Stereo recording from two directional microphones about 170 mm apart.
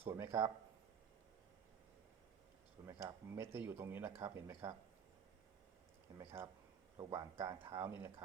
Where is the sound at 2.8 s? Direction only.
15° right (ahead or behind).